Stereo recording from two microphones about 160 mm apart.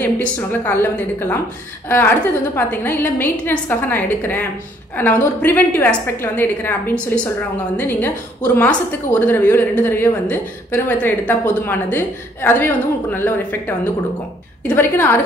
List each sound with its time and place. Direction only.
0.0 s a woman's voice: 10° left (ahead or behind)